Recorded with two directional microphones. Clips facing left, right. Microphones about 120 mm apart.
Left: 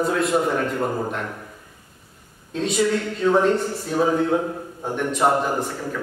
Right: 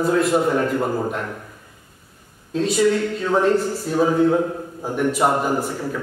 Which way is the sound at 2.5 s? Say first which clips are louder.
Right 3 dB; centre (ahead or behind).